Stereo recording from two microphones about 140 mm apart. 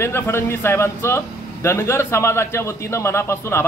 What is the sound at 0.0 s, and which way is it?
Speech, 20° left (ahead or behind).